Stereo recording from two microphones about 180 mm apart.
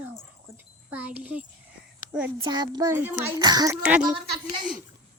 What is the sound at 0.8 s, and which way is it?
A child's voice, 10° right (ahead or behind).